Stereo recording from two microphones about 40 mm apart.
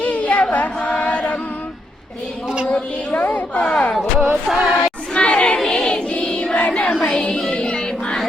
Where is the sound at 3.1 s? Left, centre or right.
Left.